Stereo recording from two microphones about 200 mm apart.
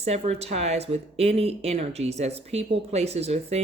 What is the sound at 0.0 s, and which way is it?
A woman's voice, 30° right (ahead or behind).